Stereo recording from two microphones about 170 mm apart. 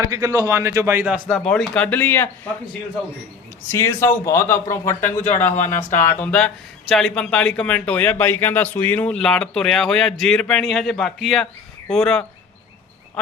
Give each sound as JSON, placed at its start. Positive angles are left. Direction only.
{"t": 0.0, "sound": "a man's voice", "side_deg": -20}
{"t": 1.3, "sound": "speech", "side_deg": 5}
{"t": 3.7, "sound": "speech", "side_deg": 15}